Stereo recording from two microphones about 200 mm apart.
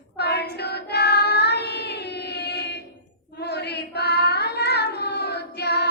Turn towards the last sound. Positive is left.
turn(degrees=55)  # may be behind; listen again after turning